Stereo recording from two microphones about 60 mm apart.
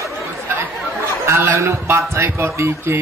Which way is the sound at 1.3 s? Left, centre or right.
Right.